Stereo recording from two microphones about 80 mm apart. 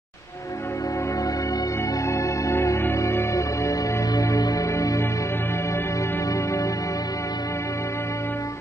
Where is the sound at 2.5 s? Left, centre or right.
Left.